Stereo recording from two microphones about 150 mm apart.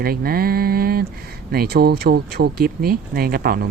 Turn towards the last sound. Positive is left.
turn(degrees=-90)